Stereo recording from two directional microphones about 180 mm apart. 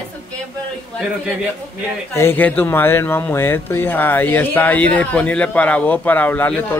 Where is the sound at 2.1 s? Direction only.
10° left (ahead or behind).